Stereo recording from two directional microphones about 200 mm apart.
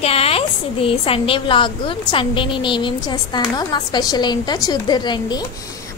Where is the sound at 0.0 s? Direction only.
30° left (ahead or behind).